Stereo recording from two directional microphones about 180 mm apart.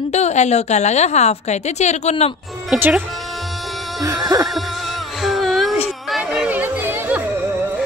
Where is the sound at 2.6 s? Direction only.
5° right (ahead or behind).